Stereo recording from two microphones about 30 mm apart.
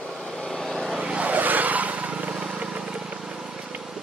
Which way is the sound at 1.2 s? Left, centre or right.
Right.